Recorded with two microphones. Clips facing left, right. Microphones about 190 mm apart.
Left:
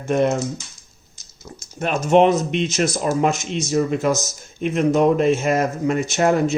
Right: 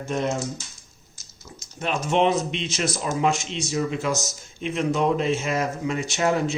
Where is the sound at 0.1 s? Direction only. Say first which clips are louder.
Left 7 dB; 55° left (ahead or behind).